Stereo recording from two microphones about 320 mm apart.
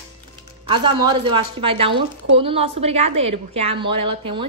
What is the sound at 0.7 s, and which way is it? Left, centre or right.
A woman's voice, centre.